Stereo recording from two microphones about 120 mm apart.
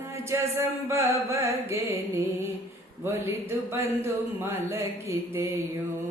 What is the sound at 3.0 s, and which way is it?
Speech, 20° right (ahead or behind).